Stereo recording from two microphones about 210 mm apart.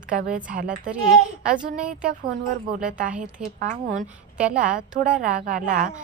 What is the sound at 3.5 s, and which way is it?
A woman's voice, 35° right (ahead or behind).